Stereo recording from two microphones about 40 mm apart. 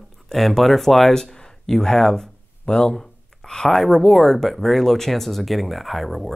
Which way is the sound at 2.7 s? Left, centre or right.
Left.